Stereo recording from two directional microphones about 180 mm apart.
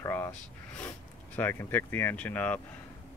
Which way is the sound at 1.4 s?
10° left (ahead or behind).